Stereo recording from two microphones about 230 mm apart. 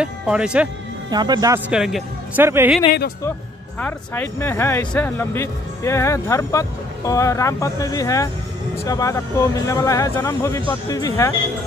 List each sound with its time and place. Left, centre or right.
0.0 s speech: centre
1.1 s speech: centre
1.7 s speech: centre
3.8 s speech: centre